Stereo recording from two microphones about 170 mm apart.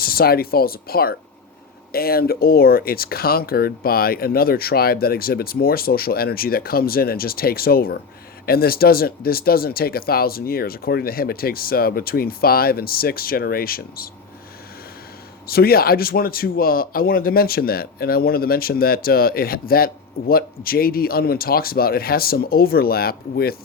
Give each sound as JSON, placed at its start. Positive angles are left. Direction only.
{"t": 0.0, "sound": "speech", "side_deg": 60}
{"t": 15.4, "sound": "speech", "side_deg": 60}